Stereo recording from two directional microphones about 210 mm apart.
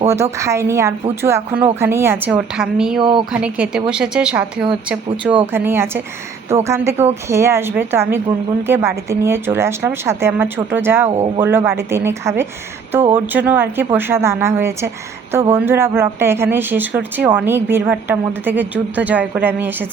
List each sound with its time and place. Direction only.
0.1 s speech: 15° right (ahead or behind)
3.0 s speech: 25° right (ahead or behind)
3.3 s a woman's voice: 5° right (ahead or behind)